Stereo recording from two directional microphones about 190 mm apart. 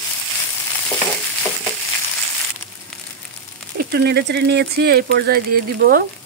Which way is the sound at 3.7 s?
55° right (ahead or behind).